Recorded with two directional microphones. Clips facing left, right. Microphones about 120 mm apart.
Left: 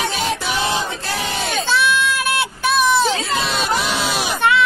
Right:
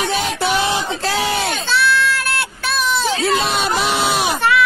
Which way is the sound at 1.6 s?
15° left (ahead or behind).